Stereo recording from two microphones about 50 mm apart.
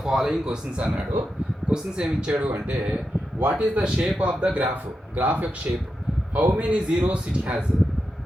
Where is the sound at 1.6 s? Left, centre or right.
Centre.